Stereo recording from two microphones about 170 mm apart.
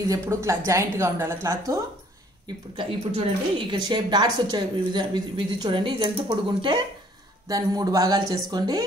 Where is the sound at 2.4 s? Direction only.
30° right (ahead or behind).